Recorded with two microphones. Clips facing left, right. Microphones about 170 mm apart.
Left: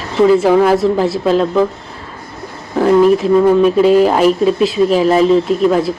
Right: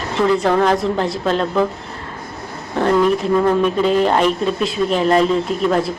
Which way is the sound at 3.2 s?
5° left (ahead or behind).